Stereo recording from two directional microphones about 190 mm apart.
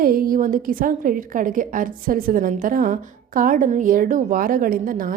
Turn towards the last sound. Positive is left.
turn(degrees=-45)  # may be behind; listen again after turning